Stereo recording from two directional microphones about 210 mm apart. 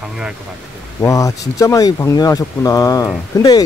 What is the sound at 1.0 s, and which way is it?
Speech, 15° left (ahead or behind).